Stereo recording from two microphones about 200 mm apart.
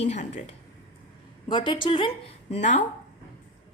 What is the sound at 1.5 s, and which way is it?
A woman's voice, 25° left (ahead or behind).